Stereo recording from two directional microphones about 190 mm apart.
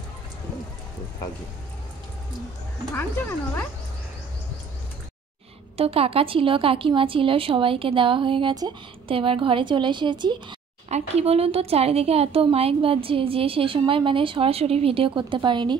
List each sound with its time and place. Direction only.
2.9 s speech: 10° left (ahead or behind)
5.8 s a woman's voice: 30° right (ahead or behind)
10.9 s a woman's voice: 35° right (ahead or behind)